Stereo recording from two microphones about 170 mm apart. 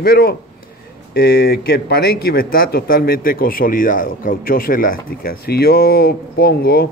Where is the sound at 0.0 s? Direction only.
65° left (ahead or behind).